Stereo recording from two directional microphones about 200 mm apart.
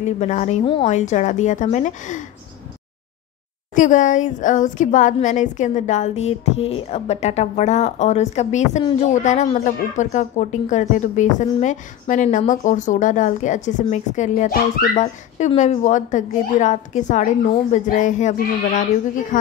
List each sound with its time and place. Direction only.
0.0 s a woman's voice: 35° left (ahead or behind)
3.7 s a woman's voice: 40° left (ahead or behind)